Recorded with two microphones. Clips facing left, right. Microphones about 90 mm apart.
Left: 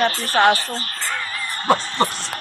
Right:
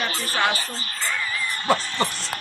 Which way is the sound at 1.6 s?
35° left (ahead or behind).